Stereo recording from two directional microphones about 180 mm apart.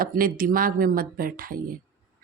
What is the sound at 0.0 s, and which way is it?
Speech, 55° right (ahead or behind).